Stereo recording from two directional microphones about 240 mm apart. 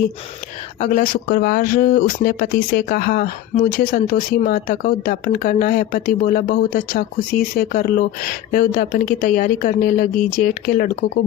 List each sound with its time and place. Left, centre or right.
0.8 s speech: left